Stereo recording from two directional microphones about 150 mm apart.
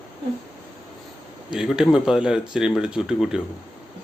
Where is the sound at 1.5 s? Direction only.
5° right (ahead or behind).